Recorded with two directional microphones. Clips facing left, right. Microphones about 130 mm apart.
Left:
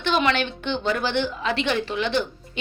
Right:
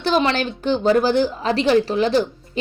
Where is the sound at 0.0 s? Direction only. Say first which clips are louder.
Right 3 dB; 35° right (ahead or behind).